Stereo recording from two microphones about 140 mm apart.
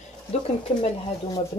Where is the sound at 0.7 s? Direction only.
45° left (ahead or behind).